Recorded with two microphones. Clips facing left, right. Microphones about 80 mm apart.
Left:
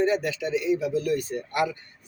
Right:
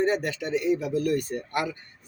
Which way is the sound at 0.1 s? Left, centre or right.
Right.